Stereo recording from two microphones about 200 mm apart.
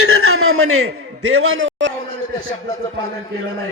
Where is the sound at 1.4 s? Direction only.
85° right.